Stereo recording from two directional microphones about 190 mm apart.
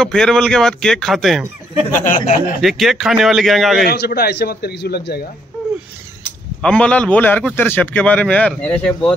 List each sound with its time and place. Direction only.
0.0 s speech: centre (ahead or behind)
2.0 s speech: 40° left (ahead or behind)
2.6 s speech: centre (ahead or behind)
3.8 s a man's voice: 55° left (ahead or behind)
6.6 s a man's voice: 5° left (ahead or behind)